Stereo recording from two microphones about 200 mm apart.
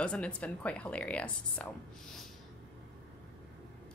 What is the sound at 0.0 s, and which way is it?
A woman's voice, 5° left (ahead or behind).